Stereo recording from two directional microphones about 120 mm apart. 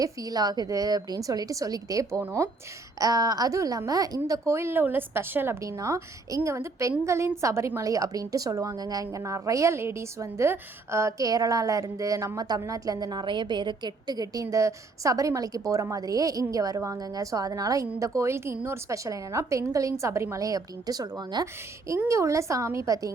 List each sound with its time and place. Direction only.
0.0 s a woman's voice: 30° right (ahead or behind)
21.4 s a woman's voice: 20° right (ahead or behind)